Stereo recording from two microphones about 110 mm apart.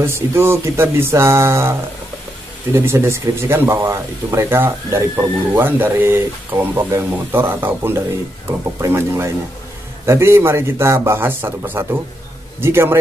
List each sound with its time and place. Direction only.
0.0 s speech: 25° right (ahead or behind)